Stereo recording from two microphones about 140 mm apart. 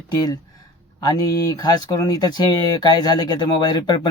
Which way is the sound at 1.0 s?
25° left (ahead or behind).